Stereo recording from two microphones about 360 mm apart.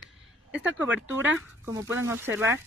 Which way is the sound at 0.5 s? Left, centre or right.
Centre.